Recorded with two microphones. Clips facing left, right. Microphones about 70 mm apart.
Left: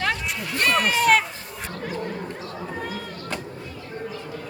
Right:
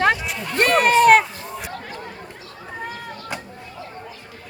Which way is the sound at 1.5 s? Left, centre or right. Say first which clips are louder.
Even; centre.